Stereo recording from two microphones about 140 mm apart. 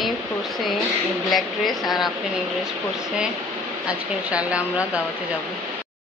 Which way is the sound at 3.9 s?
10° right (ahead or behind).